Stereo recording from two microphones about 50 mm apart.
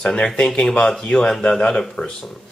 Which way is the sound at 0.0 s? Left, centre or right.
Centre.